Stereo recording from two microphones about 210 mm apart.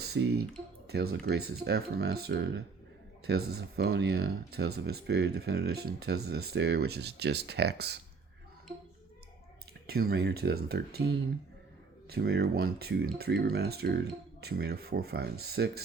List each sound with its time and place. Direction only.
0.0 s speech: 50° right (ahead or behind)
9.8 s speech: 45° right (ahead or behind)